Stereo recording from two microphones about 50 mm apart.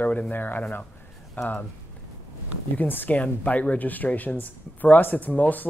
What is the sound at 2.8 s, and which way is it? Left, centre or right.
Speech, left.